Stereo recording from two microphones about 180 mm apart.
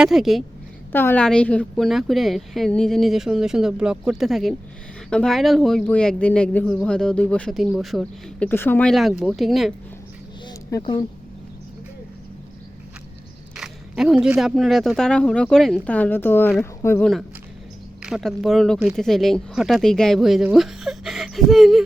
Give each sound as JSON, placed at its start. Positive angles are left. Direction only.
{"t": 0.0, "sound": "speech", "side_deg": 0}
{"t": 0.9, "sound": "speech", "side_deg": 10}
{"t": 10.4, "sound": "a sound", "side_deg": 20}
{"t": 13.6, "sound": "speech", "side_deg": 0}
{"t": 18.0, "sound": "speech", "side_deg": 0}